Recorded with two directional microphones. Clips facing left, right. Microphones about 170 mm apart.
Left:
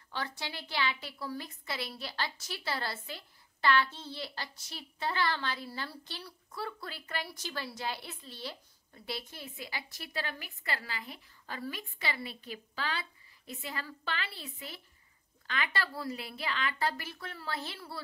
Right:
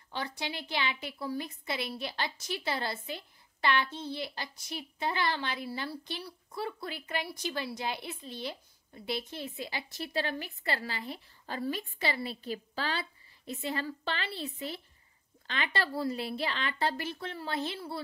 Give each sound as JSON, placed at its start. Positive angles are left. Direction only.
{"t": 0.1, "sound": "a woman's voice", "side_deg": -20}